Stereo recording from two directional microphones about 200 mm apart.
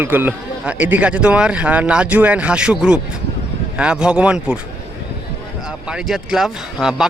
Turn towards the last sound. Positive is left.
turn(degrees=0)  # may be behind; listen again after turning